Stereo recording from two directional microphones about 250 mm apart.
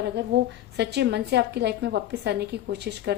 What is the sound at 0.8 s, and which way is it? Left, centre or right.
A woman's voice, right.